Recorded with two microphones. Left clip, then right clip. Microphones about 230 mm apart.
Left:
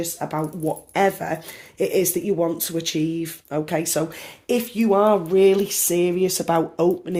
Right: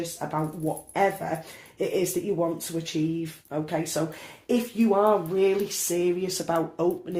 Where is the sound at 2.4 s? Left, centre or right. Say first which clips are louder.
Left 5 dB; left.